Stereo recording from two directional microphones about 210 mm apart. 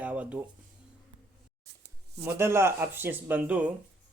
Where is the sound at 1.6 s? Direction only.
50° right (ahead or behind).